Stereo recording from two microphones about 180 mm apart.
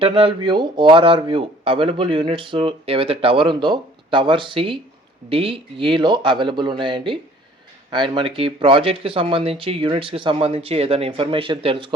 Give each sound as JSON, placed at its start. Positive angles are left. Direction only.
{"t": 0.0, "sound": "speech", "side_deg": -30}